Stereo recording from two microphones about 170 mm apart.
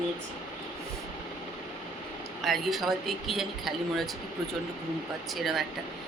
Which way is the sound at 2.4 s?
Centre (ahead or behind).